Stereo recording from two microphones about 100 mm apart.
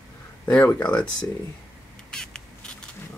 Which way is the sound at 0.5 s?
25° left (ahead or behind).